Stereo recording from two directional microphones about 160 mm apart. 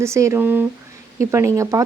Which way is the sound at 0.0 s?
15° right (ahead or behind).